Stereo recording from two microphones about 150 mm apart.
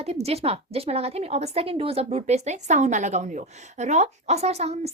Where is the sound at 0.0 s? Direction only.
45° right (ahead or behind).